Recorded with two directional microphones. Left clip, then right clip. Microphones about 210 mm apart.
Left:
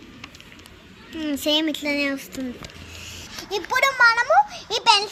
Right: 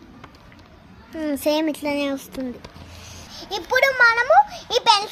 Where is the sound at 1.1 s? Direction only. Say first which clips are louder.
Right 1 dB; 50° right (ahead or behind).